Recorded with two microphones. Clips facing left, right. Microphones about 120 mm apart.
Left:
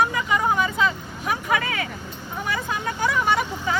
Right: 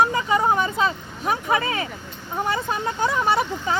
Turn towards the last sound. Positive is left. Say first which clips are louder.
# right 1 dB
turn(degrees=-25)  # may be behind; listen again after turning